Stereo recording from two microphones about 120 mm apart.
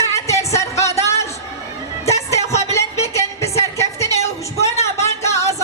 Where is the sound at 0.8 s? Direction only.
25° left (ahead or behind).